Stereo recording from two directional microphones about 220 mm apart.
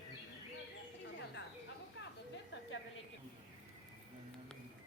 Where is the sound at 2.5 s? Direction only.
60° left (ahead or behind).